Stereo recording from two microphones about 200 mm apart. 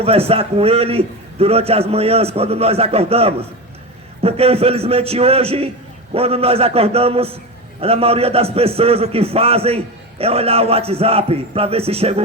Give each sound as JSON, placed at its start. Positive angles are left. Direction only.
{"t": 0.0, "sound": "a man's voice", "side_deg": -30}